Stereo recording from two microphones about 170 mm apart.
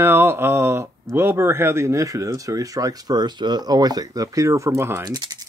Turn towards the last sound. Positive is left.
turn(degrees=-25)  # may be behind; listen again after turning